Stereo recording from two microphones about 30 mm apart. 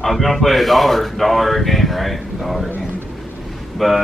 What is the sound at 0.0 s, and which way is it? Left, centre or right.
Speech, centre.